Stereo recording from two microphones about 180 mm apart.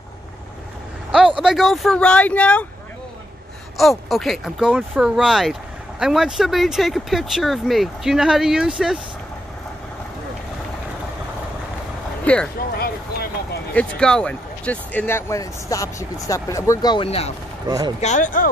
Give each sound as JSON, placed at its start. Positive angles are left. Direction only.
{"t": 1.4, "sound": "speech", "side_deg": 0}
{"t": 3.7, "sound": "speech", "side_deg": 0}
{"t": 12.3, "sound": "speech", "side_deg": 10}
{"t": 12.7, "sound": "speech", "side_deg": 60}
{"t": 13.7, "sound": "speech", "side_deg": 5}
{"t": 17.6, "sound": "speech", "side_deg": -20}
{"t": 18.0, "sound": "speech", "side_deg": 45}